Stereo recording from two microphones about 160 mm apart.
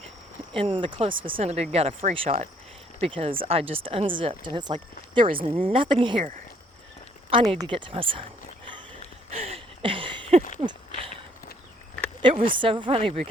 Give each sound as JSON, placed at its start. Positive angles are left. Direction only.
{"t": 0.5, "sound": "speech", "side_deg": -35}
{"t": 7.3, "sound": "speech", "side_deg": -35}
{"t": 8.6, "sound": "a sound", "side_deg": -30}
{"t": 12.3, "sound": "speech", "side_deg": -60}
{"t": 12.5, "sound": "speech", "side_deg": -30}